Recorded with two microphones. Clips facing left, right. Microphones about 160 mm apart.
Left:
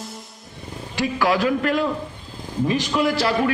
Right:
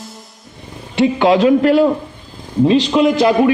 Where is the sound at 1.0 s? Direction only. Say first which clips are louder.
Right 9 dB; 20° right (ahead or behind).